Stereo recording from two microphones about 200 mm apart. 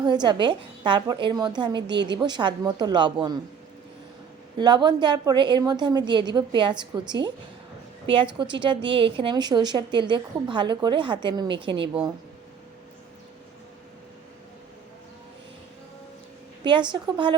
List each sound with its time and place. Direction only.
0.0 s a woman's voice: 20° right (ahead or behind)
4.5 s a woman's voice: 20° right (ahead or behind)
16.9 s a woman's voice: 25° right (ahead or behind)